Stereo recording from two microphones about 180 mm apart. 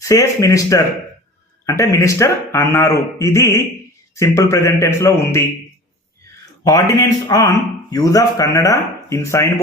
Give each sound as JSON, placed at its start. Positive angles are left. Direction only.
{"t": 0.0, "sound": "speech", "side_deg": 20}
{"t": 6.4, "sound": "speech", "side_deg": 20}